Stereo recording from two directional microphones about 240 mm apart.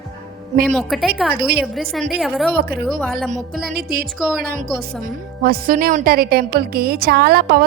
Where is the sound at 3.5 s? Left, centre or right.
Right.